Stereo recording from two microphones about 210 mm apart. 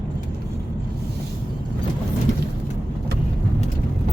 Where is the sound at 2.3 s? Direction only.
35° left (ahead or behind).